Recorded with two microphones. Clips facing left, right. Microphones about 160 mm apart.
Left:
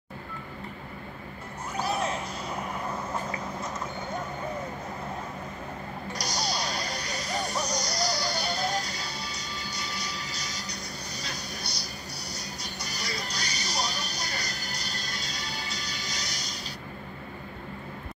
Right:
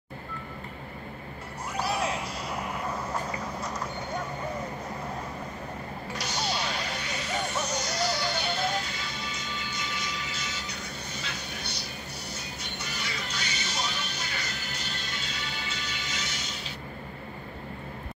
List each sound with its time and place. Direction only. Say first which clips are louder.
6.1 s music: even; 40° left (ahead or behind)